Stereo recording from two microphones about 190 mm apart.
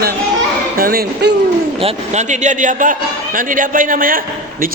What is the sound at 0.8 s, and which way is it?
Speech, 50° right (ahead or behind).